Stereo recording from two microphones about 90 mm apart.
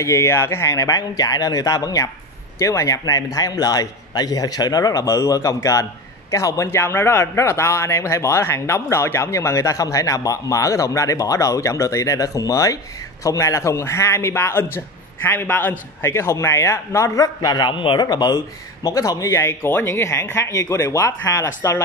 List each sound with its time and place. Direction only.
0.0 s a man's voice: 30° left (ahead or behind); by 18.0 s 65° left (ahead or behind)
18.0 s a man's voice: 45° left (ahead or behind)